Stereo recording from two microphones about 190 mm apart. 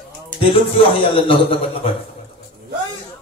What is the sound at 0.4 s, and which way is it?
A man's voice, 30° left (ahead or behind).